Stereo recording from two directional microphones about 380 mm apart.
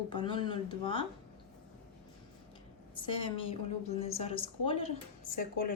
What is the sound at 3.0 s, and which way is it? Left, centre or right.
Speech, centre.